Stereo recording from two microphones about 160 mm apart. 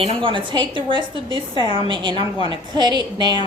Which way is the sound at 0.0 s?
35° right (ahead or behind).